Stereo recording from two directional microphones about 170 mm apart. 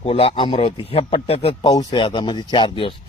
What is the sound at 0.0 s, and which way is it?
A man's voice, 35° left (ahead or behind).